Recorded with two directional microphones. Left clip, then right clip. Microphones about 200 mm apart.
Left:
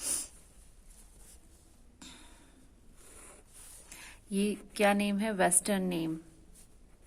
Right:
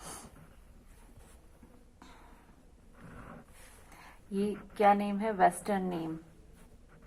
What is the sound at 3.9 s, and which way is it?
A woman's voice, 60° left (ahead or behind).